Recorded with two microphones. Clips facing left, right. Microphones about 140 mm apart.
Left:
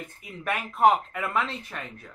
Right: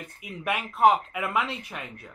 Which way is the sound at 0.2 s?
5° right (ahead or behind).